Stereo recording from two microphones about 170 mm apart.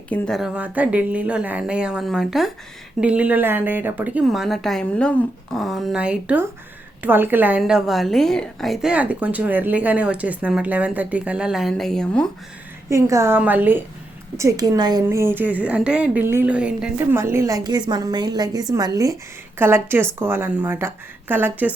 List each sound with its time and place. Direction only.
0.1 s a woman's voice: centre (ahead or behind)
7.6 s a woman's voice: centre (ahead or behind)
12.9 s a woman's voice: 15° right (ahead or behind)